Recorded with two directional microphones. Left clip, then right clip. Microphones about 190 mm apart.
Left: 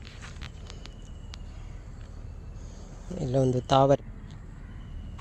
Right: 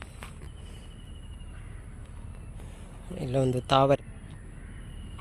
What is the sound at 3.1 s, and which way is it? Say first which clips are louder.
Speech: left 2 dB; 20° left (ahead or behind).